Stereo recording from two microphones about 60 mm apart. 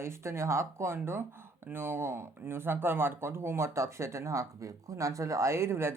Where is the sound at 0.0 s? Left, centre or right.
Right.